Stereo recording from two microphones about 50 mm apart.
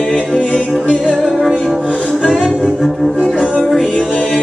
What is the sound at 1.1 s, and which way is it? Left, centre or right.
Music, centre.